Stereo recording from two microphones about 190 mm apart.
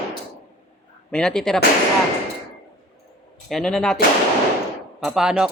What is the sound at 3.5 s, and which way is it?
Speech, 5° left (ahead or behind).